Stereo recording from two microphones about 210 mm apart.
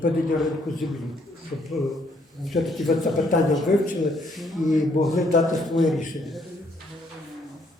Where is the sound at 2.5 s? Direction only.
Centre (ahead or behind).